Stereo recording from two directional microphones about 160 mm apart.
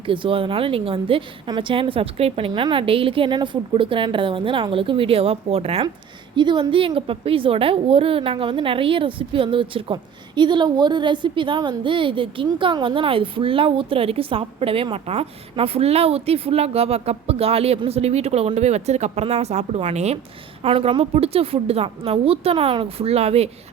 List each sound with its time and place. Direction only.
0.0 s a woman's voice: 35° right (ahead or behind)